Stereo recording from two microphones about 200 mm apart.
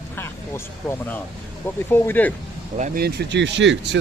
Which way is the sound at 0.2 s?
10° left (ahead or behind).